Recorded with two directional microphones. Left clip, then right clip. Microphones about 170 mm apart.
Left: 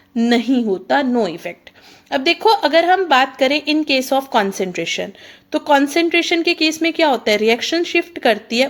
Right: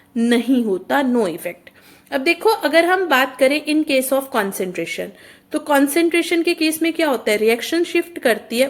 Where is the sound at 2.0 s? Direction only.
40° left (ahead or behind).